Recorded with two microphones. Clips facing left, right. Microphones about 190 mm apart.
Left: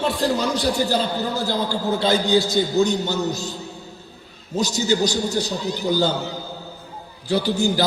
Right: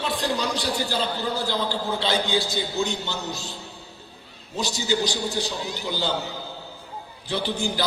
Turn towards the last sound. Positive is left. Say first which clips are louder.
# left 6 dB
turn(degrees=45)  # may be behind; listen again after turning